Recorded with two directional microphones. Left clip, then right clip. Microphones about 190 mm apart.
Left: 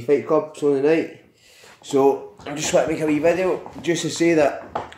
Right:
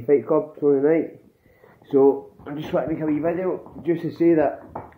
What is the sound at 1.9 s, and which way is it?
Speech, 15° left (ahead or behind).